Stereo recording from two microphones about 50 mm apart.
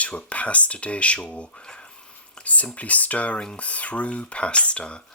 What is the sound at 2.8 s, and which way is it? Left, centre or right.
Speech, left.